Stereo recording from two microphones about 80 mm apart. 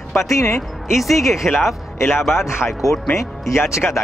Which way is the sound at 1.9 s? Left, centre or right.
Left.